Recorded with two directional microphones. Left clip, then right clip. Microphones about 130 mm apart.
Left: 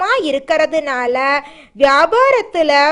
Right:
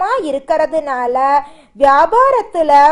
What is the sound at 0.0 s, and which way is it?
A woman's voice, 10° left (ahead or behind).